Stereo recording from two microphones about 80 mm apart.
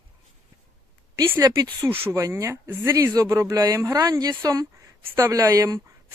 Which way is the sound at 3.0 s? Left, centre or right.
Right.